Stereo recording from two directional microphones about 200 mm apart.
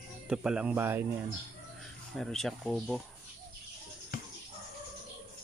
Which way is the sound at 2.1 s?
Centre (ahead or behind).